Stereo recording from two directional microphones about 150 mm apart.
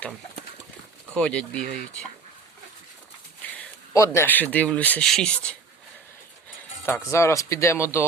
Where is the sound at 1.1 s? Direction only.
5° left (ahead or behind).